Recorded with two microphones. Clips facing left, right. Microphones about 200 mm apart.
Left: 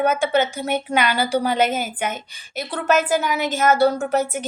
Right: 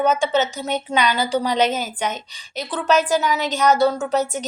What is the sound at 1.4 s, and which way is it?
A woman's voice, 50° left (ahead or behind).